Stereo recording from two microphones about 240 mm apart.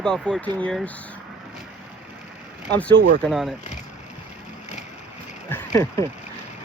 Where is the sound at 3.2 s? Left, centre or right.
Centre.